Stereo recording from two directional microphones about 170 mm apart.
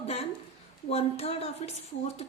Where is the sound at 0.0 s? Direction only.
35° left (ahead or behind).